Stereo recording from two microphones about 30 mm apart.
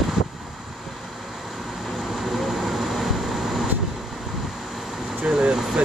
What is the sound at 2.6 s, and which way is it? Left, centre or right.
Vehicle, centre.